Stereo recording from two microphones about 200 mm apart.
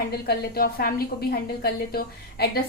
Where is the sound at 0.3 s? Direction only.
50° left (ahead or behind).